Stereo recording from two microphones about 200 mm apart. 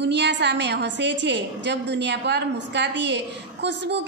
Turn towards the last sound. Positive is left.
turn(degrees=-60)  # may be behind; listen again after turning